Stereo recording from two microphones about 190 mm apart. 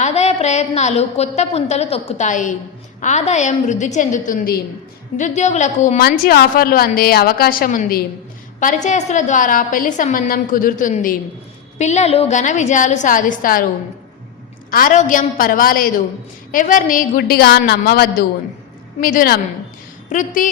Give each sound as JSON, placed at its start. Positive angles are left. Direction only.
{"t": 0.0, "sound": "a woman's voice", "side_deg": 35}
{"t": 6.0, "sound": "a woman's voice", "side_deg": 55}
{"t": 14.7, "sound": "a woman's voice", "side_deg": 45}